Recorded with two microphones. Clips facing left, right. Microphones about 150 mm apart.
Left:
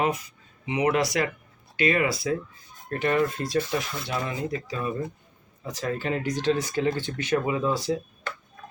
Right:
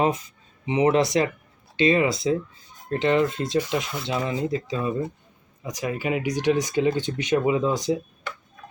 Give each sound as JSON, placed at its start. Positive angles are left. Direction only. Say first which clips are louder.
{"t": 0.7, "sound": "speech", "louder": "right 4 dB", "side_deg": -25}
{"t": 5.6, "sound": "speech", "louder": "right 2 dB", "side_deg": -15}